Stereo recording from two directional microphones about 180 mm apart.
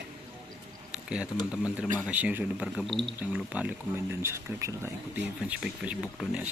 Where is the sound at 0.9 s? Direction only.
5° right (ahead or behind).